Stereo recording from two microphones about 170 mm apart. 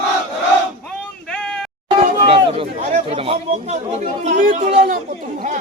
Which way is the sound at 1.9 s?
35° right (ahead or behind).